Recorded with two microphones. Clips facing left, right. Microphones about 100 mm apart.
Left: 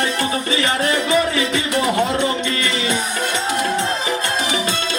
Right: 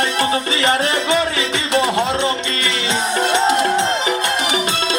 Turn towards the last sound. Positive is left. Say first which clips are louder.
# right 4 dB
turn(degrees=-20)  # may be behind; listen again after turning